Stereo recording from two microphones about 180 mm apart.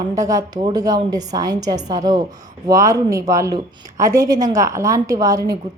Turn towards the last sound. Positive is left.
turn(degrees=-20)  # may be behind; listen again after turning